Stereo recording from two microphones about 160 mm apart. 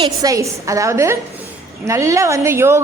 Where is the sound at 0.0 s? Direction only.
20° right (ahead or behind).